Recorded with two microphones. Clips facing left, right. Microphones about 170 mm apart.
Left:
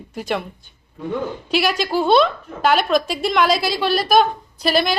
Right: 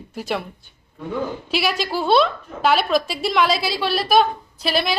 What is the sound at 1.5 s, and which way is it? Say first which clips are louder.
A woman's voice: left 5 dB; centre (ahead or behind).